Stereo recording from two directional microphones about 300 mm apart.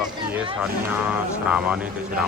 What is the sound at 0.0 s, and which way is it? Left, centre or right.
Vehicle, centre.